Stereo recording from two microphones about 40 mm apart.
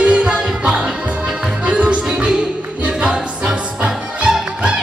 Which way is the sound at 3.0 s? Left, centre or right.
Centre.